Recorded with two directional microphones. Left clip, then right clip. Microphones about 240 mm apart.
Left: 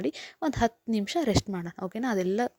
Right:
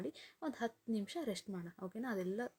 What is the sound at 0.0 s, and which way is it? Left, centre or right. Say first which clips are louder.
Speech: left 14 dB; left.